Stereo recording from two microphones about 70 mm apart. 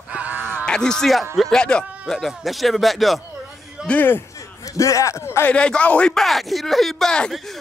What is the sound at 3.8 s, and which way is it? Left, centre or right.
Speech, left.